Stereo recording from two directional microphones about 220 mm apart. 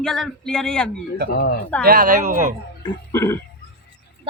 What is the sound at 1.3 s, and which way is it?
Speech, 40° left (ahead or behind).